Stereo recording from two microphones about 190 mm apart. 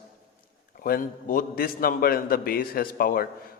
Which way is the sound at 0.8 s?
50° left (ahead or behind).